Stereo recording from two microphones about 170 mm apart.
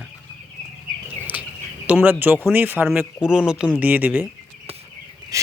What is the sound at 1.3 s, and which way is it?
Bird, 10° right (ahead or behind).